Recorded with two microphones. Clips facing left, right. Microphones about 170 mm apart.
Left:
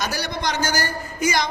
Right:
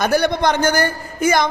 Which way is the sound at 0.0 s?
55° right (ahead or behind).